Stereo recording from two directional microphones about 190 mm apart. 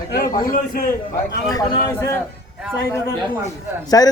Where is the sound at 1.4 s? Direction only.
20° left (ahead or behind).